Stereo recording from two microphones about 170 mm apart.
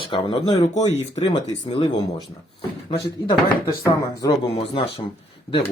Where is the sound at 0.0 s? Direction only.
30° left (ahead or behind).